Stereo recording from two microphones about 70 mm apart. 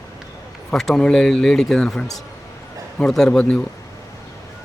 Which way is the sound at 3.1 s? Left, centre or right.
Centre.